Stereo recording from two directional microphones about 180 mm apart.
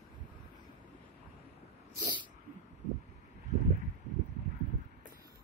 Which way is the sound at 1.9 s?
25° right (ahead or behind).